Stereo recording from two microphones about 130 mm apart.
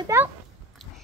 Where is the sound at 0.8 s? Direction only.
5° left (ahead or behind).